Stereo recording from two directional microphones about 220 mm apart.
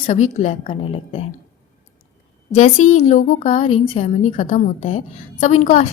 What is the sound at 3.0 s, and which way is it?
Speech, 35° left (ahead or behind).